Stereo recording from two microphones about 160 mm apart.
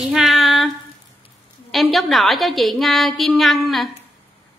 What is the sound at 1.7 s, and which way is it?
A woman's voice, centre (ahead or behind).